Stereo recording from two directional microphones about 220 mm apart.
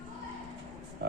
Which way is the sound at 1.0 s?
45° right (ahead or behind).